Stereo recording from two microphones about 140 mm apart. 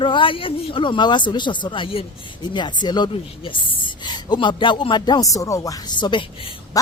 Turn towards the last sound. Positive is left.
turn(degrees=35)  # may be behind; listen again after turning